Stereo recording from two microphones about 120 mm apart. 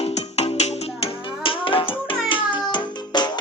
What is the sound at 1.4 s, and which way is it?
Music, 45° left (ahead or behind).